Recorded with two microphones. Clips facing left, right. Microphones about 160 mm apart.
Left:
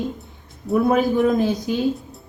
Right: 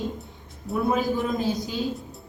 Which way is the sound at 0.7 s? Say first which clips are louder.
Left 6 dB; 70° left (ahead or behind).